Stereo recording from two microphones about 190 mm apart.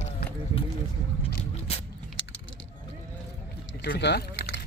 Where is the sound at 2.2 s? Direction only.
85° left.